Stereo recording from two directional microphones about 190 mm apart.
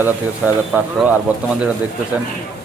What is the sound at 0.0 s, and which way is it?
Speech, 10° right (ahead or behind).